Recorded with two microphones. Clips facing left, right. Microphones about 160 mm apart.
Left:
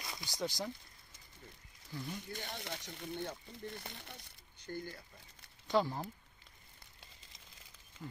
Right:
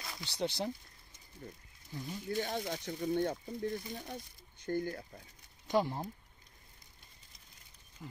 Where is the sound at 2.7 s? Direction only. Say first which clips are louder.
Right 9 dB; 65° right (ahead or behind).